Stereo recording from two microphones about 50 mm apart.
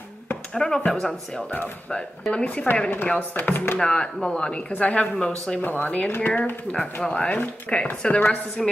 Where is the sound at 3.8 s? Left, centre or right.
Centre.